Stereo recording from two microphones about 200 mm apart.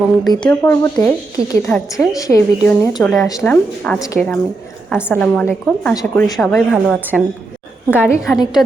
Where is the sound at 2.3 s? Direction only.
15° left (ahead or behind).